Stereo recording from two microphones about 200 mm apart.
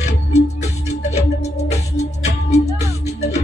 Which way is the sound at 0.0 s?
35° left (ahead or behind).